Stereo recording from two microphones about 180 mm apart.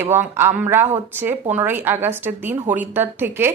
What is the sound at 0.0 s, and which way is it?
Speech, 15° right (ahead or behind).